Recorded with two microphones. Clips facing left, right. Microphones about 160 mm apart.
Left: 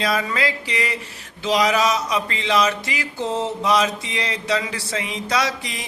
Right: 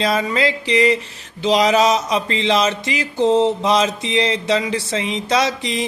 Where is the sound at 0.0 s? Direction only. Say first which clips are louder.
Right 4 dB; 25° right (ahead or behind).